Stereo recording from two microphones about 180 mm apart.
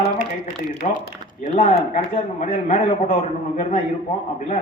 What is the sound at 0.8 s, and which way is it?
Speech, 40° left (ahead or behind).